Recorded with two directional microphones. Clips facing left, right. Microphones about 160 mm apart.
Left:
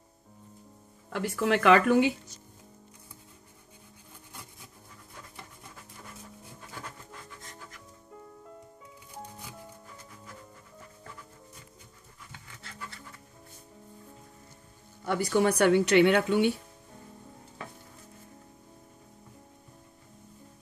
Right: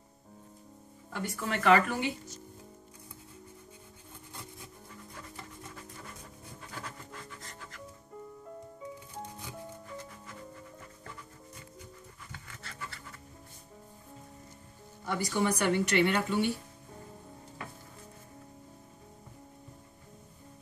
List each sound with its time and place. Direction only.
1.1 s speech: 70° left (ahead or behind)
15.0 s speech: 65° left (ahead or behind)